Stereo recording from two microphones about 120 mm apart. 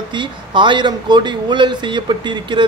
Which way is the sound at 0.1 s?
40° right (ahead or behind).